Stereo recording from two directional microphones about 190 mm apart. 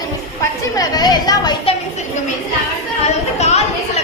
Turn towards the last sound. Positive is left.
turn(degrees=35)  # may be behind; listen again after turning